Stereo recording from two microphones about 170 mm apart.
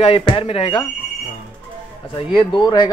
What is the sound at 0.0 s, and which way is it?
Speech, 30° left (ahead or behind).